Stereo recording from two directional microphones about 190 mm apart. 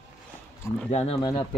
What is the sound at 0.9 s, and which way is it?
Speech, 30° left (ahead or behind).